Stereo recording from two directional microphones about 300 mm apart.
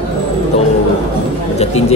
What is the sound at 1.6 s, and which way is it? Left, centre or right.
Speech, left.